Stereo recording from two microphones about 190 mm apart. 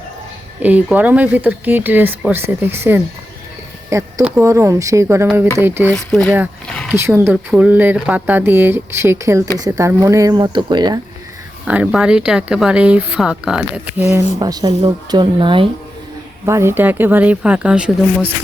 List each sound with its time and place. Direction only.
0.6 s speech: 10° right (ahead or behind)
6.9 s speech: 15° right (ahead or behind)
11.6 s speech: 5° right (ahead or behind)
14.1 s speech: 15° right (ahead or behind)
16.5 s speech: 15° right (ahead or behind)